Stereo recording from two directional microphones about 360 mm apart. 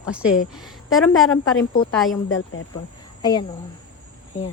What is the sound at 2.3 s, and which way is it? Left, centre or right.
Speech, left.